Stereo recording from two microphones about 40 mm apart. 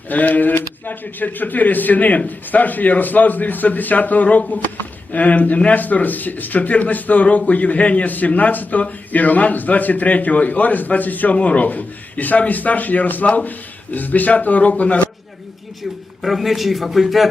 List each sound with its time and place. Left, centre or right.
0.1 s speech: left
16.2 s a man's voice: centre